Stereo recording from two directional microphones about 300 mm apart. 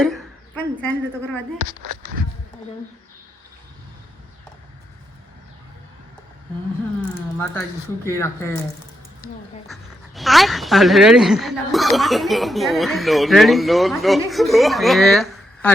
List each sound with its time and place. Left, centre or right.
0.0 s speech: centre
1.5 s speech: right
7.3 s speech: centre
10.2 s a woman's voice: centre